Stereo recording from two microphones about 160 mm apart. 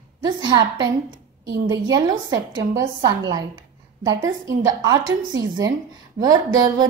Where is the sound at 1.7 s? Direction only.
25° right (ahead or behind).